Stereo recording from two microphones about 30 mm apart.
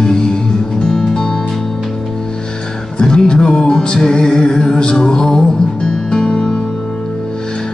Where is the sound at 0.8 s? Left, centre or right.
Left.